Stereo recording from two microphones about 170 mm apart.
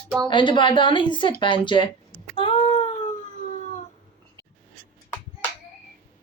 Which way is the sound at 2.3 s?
30° left (ahead or behind).